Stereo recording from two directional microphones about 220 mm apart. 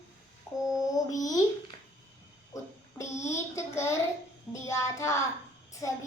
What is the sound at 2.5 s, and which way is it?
A child's voice, 15° left (ahead or behind).